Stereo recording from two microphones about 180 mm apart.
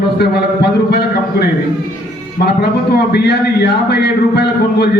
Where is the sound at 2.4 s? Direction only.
60° left (ahead or behind).